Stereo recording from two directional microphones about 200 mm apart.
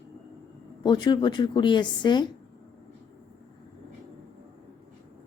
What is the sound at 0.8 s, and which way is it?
Speech, 20° left (ahead or behind).